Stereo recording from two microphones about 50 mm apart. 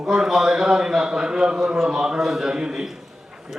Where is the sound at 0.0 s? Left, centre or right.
Centre.